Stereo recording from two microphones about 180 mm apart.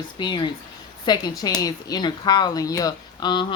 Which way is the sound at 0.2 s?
25° left (ahead or behind).